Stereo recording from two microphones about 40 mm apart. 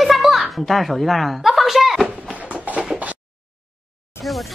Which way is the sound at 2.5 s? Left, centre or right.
Right.